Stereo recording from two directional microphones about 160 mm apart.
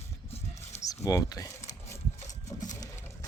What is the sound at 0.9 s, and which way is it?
Speech, 20° left (ahead or behind).